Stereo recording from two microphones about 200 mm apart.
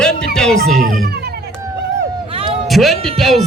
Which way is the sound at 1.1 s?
55° right (ahead or behind).